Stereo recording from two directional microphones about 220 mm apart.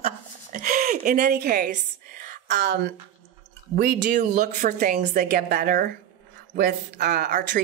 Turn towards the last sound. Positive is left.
turn(degrees=-40)  # may be behind; listen again after turning